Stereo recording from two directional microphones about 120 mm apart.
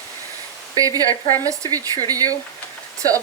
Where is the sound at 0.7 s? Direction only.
30° right (ahead or behind).